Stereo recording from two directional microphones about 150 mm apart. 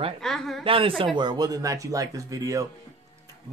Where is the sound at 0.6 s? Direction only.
35° right (ahead or behind).